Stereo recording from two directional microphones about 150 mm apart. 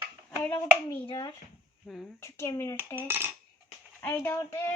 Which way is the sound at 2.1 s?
15° left (ahead or behind).